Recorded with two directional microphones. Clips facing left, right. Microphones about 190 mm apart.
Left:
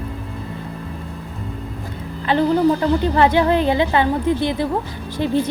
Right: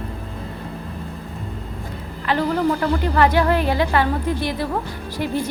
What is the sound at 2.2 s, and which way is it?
A woman's voice, 25° left (ahead or behind).